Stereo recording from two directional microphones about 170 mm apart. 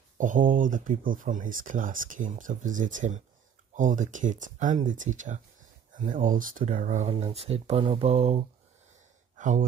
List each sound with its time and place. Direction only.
0.2 s speech: 50° right (ahead or behind)
9.4 s speech: 50° right (ahead or behind)